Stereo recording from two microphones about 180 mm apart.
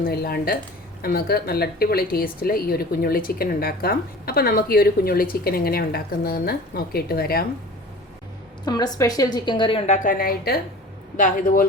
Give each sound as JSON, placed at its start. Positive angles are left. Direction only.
{"t": 0.0, "sound": "a woman's voice", "side_deg": 60}
{"t": 8.6, "sound": "a woman's voice", "side_deg": 20}